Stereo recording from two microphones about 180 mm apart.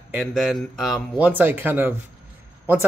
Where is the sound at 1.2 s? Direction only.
10° right (ahead or behind).